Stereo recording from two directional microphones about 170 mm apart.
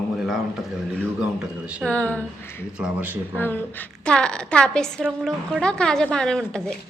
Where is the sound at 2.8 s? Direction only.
10° right (ahead or behind).